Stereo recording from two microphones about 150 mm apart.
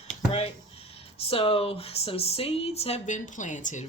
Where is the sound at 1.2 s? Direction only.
40° left (ahead or behind).